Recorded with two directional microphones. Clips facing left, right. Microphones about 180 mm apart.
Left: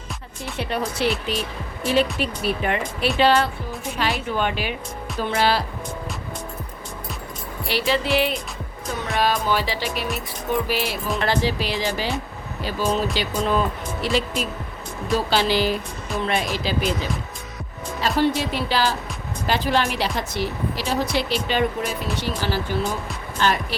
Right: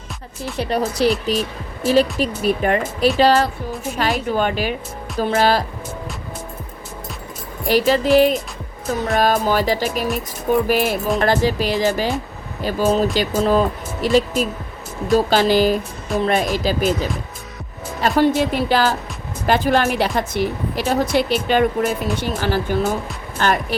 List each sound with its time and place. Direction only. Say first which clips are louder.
0.5 s a woman's voice: right 5 dB; 40° right (ahead or behind)
7.7 s a woman's voice: right 7 dB; 45° right (ahead or behind)